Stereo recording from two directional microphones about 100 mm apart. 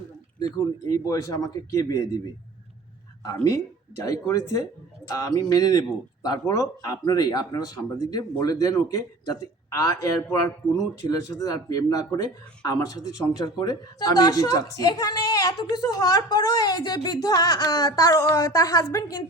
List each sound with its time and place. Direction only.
0.3 s speech: 40° left (ahead or behind)
4.0 s speech: 35° left (ahead or behind)